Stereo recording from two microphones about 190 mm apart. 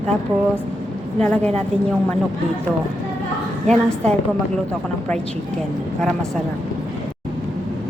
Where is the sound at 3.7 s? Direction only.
40° right (ahead or behind).